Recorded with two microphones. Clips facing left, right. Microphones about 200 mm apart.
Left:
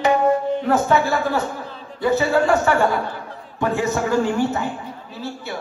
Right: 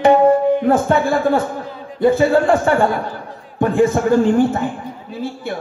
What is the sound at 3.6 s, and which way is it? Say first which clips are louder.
Speech: right 6 dB; 50° right (ahead or behind).